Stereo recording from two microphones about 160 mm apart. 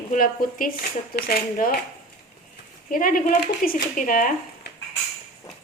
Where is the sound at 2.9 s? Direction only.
60° left (ahead or behind).